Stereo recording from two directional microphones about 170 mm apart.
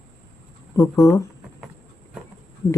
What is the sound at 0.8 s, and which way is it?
Speech, 20° left (ahead or behind).